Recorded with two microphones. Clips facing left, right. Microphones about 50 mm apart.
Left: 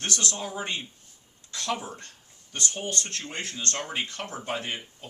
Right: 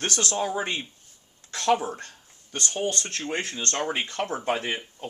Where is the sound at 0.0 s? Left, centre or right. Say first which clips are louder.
Right 4 dB; right.